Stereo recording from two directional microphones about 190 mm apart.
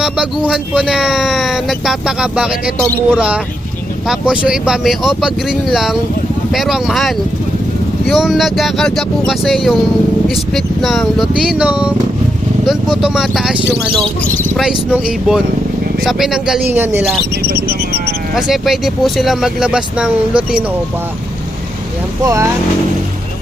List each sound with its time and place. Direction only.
0.0 s speech: 5° right (ahead or behind)
18.3 s speech: centre (ahead or behind)
22.2 s speech: 15° right (ahead or behind)